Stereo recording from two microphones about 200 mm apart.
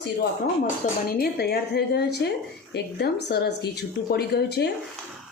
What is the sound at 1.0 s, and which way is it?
A woman's voice, 50° left (ahead or behind).